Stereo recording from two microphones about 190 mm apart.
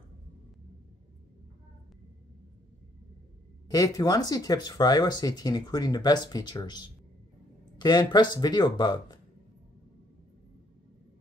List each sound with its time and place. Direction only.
3.6 s speech: 20° left (ahead or behind)